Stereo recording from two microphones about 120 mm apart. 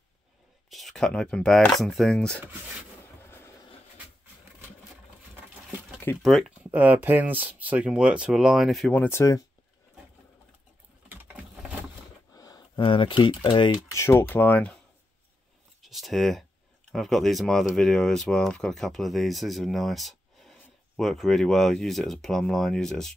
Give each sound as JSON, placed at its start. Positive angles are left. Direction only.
{"t": 0.7, "sound": "speech", "side_deg": 0}
{"t": 3.2, "sound": "vehicle", "side_deg": 20}
{"t": 6.2, "sound": "speech", "side_deg": 0}
{"t": 6.6, "sound": "speech", "side_deg": -10}
{"t": 8.9, "sound": "speech", "side_deg": 15}
{"t": 11.1, "sound": "typing", "side_deg": -15}
{"t": 12.4, "sound": "a sound", "side_deg": 35}
{"t": 13.3, "sound": "speech", "side_deg": 40}
{"t": 13.9, "sound": "speech", "side_deg": 20}
{"t": 15.8, "sound": "a sound", "side_deg": 0}
{"t": 16.9, "sound": "speech", "side_deg": 0}